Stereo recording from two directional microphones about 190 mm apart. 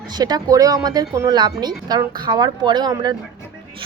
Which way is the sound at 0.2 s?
20° right (ahead or behind).